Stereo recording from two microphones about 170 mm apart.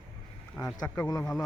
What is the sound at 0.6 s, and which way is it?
Speech, 10° left (ahead or behind).